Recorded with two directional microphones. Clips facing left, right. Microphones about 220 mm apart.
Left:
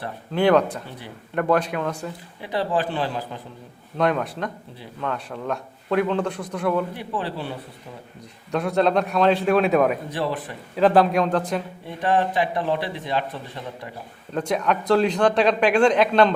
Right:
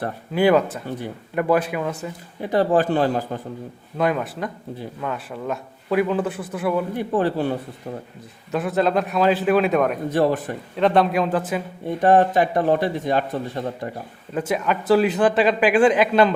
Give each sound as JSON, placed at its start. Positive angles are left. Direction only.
{"t": 0.3, "sound": "speech", "side_deg": -5}
{"t": 2.4, "sound": "speech", "side_deg": -45}
{"t": 3.9, "sound": "speech", "side_deg": -5}
{"t": 6.9, "sound": "speech", "side_deg": -45}
{"t": 8.5, "sound": "speech", "side_deg": 0}
{"t": 10.1, "sound": "speech", "side_deg": -45}
{"t": 10.8, "sound": "speech", "side_deg": 0}
{"t": 11.9, "sound": "speech", "side_deg": -45}
{"t": 14.3, "sound": "speech", "side_deg": -5}